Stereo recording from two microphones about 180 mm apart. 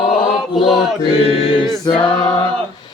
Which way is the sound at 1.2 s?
30° left (ahead or behind).